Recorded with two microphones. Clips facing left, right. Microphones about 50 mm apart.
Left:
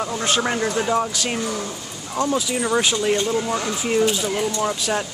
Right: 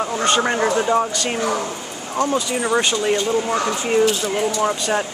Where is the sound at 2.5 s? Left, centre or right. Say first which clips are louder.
Right 1 dB; centre.